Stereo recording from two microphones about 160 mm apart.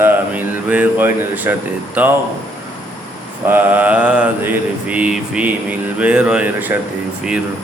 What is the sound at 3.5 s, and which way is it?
Mantra, 10° right (ahead or behind).